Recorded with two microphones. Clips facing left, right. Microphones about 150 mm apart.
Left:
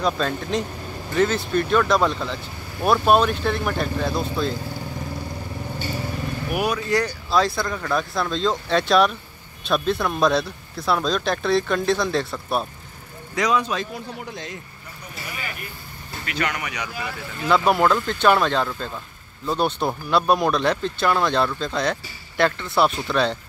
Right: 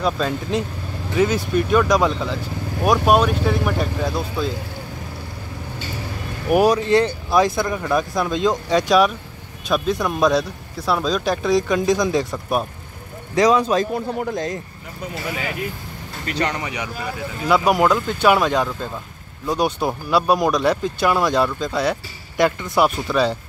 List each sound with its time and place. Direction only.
0.0 s speech: 5° right (ahead or behind)
6.5 s speech: 40° right (ahead or behind)
6.9 s speech: 25° right (ahead or behind)
13.3 s speech: 35° right (ahead or behind)
13.9 s speech: 50° right (ahead or behind)
15.0 s speech: 90° right
16.3 s speech: 30° right (ahead or behind)
17.5 s speech: 10° right (ahead or behind)